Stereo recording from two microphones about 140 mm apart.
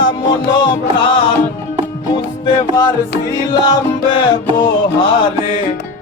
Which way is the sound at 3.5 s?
30° left (ahead or behind).